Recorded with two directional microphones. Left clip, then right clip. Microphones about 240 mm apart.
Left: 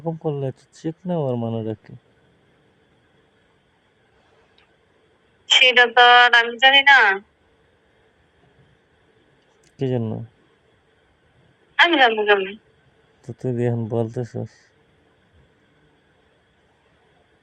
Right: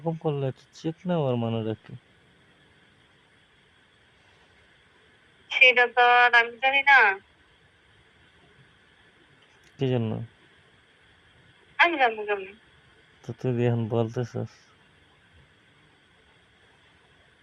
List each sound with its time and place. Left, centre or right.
0.0 s speech: centre
5.5 s speech: left
9.7 s speech: centre
11.8 s speech: left
13.2 s speech: centre